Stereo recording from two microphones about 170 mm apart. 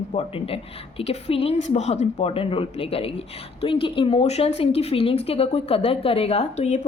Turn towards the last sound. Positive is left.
turn(degrees=40)  # may be behind; listen again after turning